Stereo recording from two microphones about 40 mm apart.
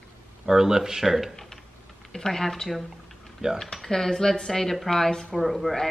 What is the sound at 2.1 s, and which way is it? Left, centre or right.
Speech, centre.